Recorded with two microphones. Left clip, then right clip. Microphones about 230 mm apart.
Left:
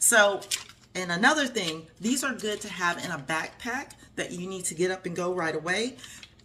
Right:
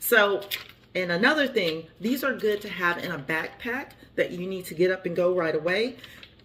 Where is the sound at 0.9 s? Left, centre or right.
Centre.